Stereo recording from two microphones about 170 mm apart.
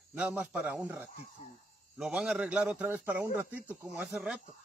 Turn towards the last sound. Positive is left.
turn(degrees=-5)  # may be behind; listen again after turning